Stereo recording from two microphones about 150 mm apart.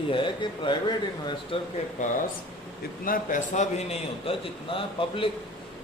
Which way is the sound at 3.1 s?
65° left (ahead or behind).